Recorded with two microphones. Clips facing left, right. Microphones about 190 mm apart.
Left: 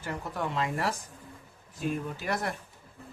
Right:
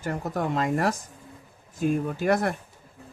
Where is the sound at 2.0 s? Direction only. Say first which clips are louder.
Right 8 dB; 50° right (ahead or behind).